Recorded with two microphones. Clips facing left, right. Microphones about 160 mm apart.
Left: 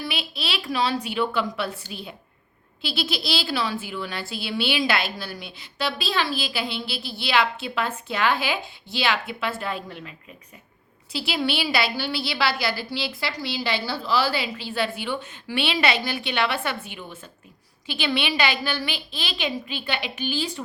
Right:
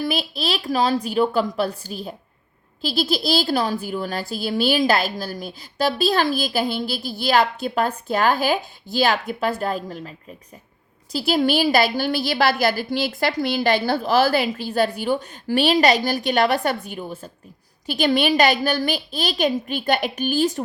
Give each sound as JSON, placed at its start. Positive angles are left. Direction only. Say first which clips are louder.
{"t": 0.0, "sound": "a woman's voice", "louder": "right 7 dB", "side_deg": -40}